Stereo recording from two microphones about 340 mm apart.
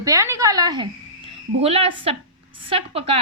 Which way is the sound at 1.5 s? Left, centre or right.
Centre.